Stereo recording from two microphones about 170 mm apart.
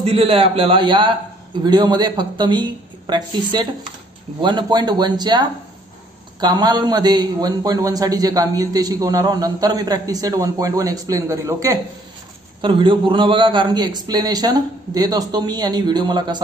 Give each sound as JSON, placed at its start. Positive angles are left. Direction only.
{"t": 0.0, "sound": "a man's voice", "side_deg": -35}
{"t": 12.6, "sound": "a man's voice", "side_deg": -30}